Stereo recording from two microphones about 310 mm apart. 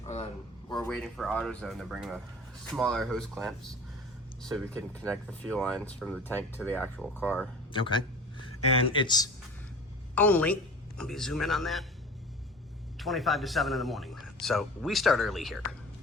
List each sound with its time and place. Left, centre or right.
0.0 s a sound: left
0.7 s speech: centre
13.0 s speech: centre